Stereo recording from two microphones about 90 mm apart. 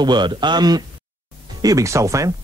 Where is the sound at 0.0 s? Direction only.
55° right (ahead or behind).